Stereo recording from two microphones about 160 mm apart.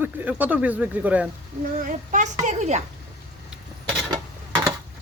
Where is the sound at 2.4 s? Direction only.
45° right (ahead or behind).